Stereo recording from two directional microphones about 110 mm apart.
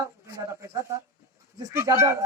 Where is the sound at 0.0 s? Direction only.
30° right (ahead or behind).